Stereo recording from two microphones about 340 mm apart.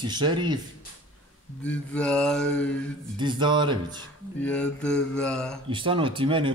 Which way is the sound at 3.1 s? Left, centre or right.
Centre.